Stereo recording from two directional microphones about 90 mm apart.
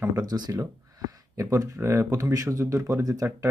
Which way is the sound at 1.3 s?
35° right (ahead or behind).